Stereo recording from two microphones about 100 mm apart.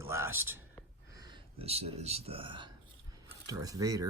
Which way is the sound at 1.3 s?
80° right.